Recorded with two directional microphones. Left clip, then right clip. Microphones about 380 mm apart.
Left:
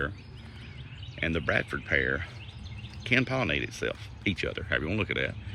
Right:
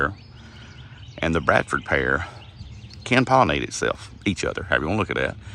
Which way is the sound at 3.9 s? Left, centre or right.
Centre.